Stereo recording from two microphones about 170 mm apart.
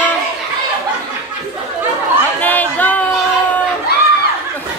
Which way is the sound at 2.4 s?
10° left (ahead or behind).